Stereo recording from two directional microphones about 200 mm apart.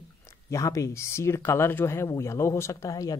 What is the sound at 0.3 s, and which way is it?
Speech, 15° left (ahead or behind).